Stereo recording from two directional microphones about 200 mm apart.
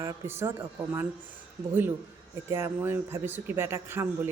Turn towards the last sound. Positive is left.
turn(degrees=-10)  # may be behind; listen again after turning